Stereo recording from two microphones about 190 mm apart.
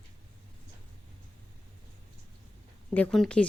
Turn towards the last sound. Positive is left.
turn(degrees=5)  # may be behind; listen again after turning